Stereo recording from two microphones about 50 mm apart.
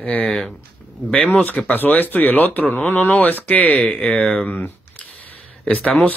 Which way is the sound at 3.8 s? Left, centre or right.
Centre.